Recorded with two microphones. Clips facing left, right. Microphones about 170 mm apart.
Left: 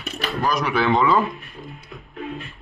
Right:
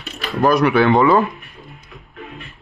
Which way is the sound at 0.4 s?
60° right (ahead or behind).